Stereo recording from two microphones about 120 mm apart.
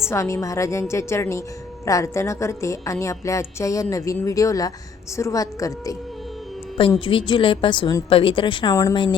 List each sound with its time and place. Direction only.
0.0 s a woman's voice: 25° left (ahead or behind)
7.0 s a woman's voice: 45° left (ahead or behind)
8.7 s a woman's voice: 25° left (ahead or behind)